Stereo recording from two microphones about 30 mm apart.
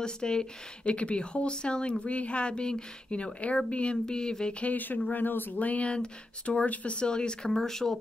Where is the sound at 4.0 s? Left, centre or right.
Left.